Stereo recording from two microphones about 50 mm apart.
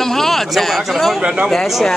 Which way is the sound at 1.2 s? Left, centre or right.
Centre.